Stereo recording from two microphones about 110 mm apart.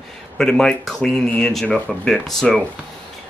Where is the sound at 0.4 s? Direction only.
5° left (ahead or behind).